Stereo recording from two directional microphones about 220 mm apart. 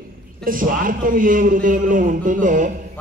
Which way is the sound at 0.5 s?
40° right (ahead or behind).